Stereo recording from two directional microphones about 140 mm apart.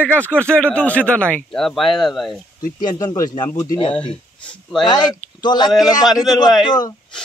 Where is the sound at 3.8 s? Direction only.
40° left (ahead or behind).